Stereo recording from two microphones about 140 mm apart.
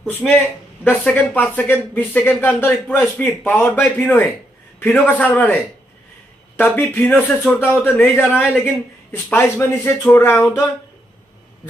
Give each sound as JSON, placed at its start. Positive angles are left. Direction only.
{"t": 0.3, "sound": "speech", "side_deg": 10}
{"t": 6.6, "sound": "speech", "side_deg": 10}